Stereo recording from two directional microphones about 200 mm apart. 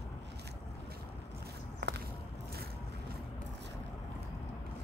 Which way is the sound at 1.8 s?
60° right (ahead or behind).